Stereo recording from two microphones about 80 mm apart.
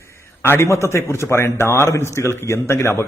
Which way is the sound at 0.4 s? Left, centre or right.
Left.